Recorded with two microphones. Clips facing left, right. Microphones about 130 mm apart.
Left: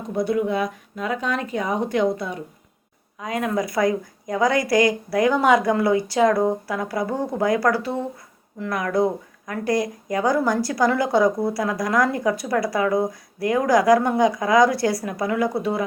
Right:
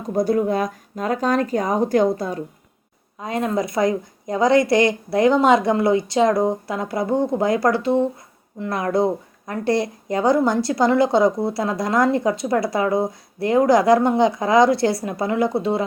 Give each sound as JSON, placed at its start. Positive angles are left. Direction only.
{"t": 0.1, "sound": "speech", "side_deg": -40}